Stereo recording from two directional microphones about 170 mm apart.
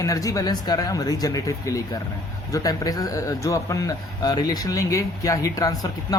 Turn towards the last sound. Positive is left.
turn(degrees=20)  # may be behind; listen again after turning